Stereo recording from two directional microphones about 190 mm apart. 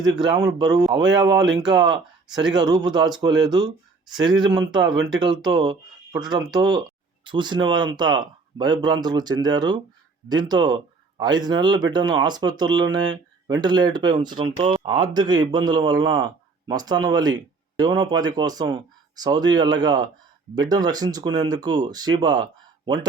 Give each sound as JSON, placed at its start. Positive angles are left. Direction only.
{"t": 0.2, "sound": "speech", "side_deg": -20}
{"t": 4.7, "sound": "speech", "side_deg": -20}